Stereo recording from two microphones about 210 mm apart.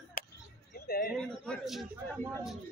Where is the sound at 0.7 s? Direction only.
45° left (ahead or behind).